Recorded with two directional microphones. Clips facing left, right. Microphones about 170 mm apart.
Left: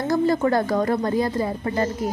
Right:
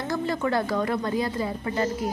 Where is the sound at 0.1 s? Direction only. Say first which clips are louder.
Left 6 dB; 40° left (ahead or behind).